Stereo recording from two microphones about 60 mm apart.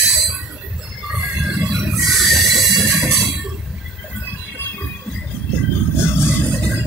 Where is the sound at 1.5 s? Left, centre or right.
Centre.